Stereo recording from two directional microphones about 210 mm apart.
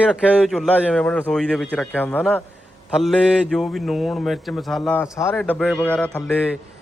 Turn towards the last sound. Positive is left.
turn(degrees=5)  # may be behind; listen again after turning